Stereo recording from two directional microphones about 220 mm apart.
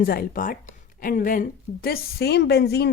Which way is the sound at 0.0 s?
40° left (ahead or behind).